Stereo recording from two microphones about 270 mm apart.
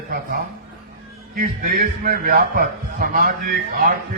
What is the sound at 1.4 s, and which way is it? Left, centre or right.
A man's voice, right.